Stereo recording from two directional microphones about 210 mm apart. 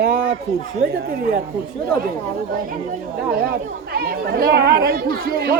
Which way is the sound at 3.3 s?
45° right (ahead or behind).